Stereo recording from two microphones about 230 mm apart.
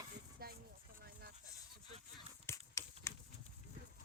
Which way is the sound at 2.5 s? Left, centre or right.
Centre.